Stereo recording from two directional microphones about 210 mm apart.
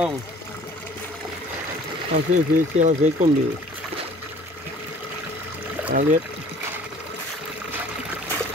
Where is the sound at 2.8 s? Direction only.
35° right (ahead or behind).